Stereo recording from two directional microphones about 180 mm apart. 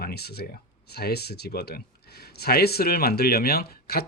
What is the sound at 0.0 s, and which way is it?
Speech, 60° left (ahead or behind).